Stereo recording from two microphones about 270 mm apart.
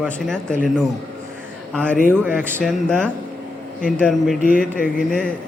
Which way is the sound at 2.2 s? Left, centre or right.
Centre.